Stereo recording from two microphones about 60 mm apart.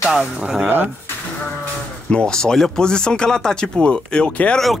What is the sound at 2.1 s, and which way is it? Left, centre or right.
Speech, centre.